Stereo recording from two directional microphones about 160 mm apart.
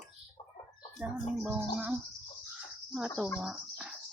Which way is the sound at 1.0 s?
5° right (ahead or behind).